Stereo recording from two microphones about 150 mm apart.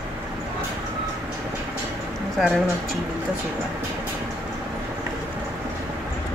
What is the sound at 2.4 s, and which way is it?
Speech, centre (ahead or behind).